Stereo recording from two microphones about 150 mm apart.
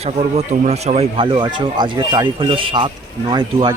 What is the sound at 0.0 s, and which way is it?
Speech, 45° right (ahead or behind).